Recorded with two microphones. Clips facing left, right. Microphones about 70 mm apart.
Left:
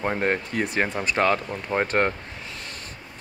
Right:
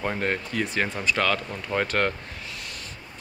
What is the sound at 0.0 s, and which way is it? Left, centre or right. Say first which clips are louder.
Speech: left 3 dB; left.